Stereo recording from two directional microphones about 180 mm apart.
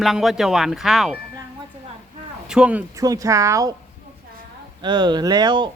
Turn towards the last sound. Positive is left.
turn(degrees=-25)  # may be behind; listen again after turning